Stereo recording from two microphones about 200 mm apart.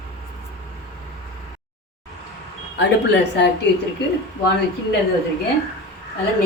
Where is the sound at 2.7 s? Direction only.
60° left (ahead or behind).